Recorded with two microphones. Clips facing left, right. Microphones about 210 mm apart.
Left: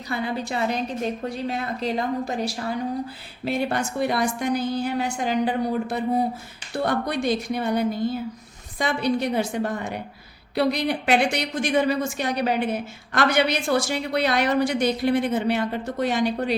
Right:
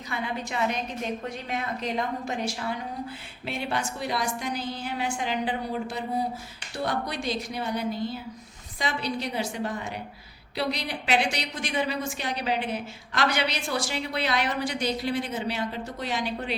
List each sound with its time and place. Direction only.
0.1 s a woman's voice: 35° left (ahead or behind)